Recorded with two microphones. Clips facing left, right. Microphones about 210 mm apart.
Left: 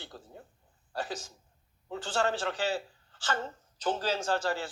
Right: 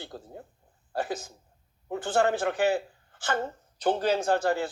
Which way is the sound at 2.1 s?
20° right (ahead or behind).